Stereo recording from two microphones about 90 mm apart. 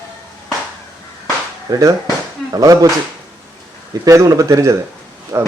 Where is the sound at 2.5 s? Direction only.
40° right (ahead or behind).